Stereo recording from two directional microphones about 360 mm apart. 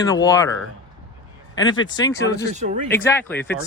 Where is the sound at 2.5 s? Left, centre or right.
Centre.